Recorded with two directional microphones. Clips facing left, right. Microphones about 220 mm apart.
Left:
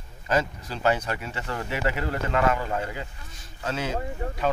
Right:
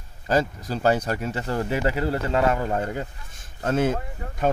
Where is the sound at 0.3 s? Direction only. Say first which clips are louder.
Right 3 dB; 35° right (ahead or behind).